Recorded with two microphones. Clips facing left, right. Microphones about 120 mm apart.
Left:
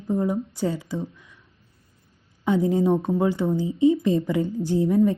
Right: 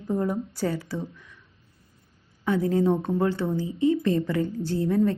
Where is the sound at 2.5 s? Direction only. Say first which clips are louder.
Left 2 dB; 15° left (ahead or behind).